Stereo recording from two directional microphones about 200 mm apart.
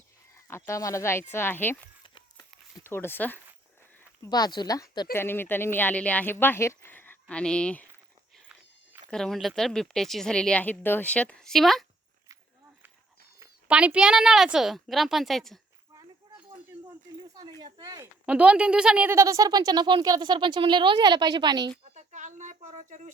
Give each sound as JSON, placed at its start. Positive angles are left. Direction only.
{"t": 0.4, "sound": "speech", "side_deg": 15}
{"t": 2.0, "sound": "a sound", "side_deg": 25}
{"t": 2.8, "sound": "speech", "side_deg": 10}
{"t": 4.2, "sound": "speech", "side_deg": 20}
{"t": 9.0, "sound": "speech", "side_deg": 5}
{"t": 13.4, "sound": "speech", "side_deg": -5}
{"t": 17.3, "sound": "speech", "side_deg": -20}
{"t": 18.3, "sound": "speech", "side_deg": -5}
{"t": 21.9, "sound": "a sound", "side_deg": -40}